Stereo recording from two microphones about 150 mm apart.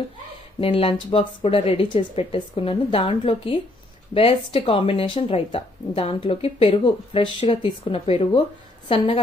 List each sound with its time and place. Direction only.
0.6 s speech: 40° left (ahead or behind)